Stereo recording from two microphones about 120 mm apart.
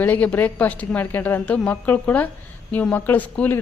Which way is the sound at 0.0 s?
15° left (ahead or behind).